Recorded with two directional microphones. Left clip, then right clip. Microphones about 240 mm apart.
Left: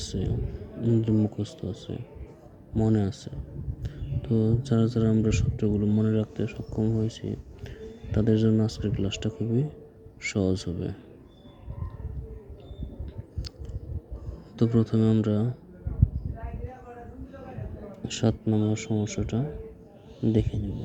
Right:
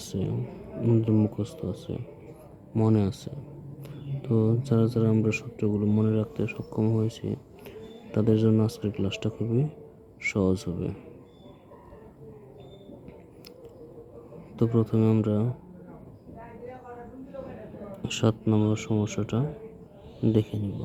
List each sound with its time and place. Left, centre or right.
0.0 s a sound: centre
0.8 s speech: centre
14.5 s speech: centre
18.0 s speech: centre